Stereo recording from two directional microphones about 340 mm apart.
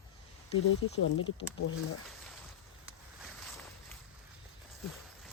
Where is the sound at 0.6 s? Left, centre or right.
Left.